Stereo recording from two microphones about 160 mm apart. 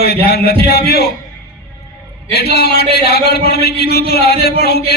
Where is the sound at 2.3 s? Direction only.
90° left.